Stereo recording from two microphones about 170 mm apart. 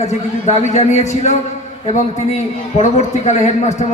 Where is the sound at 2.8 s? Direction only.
45° left (ahead or behind).